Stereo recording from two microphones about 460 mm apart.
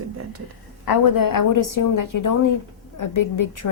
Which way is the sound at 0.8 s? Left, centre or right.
Left.